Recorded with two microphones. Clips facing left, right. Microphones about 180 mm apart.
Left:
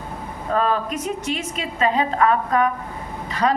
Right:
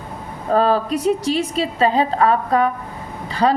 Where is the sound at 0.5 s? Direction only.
35° right (ahead or behind).